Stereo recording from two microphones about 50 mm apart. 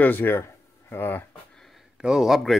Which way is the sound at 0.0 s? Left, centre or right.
Left.